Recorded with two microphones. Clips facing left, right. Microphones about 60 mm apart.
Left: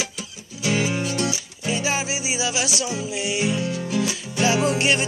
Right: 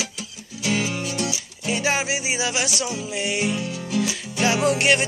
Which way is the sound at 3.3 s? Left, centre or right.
Centre.